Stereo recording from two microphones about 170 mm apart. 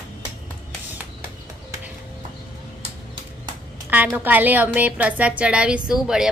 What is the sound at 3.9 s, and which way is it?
A woman's voice, 10° right (ahead or behind).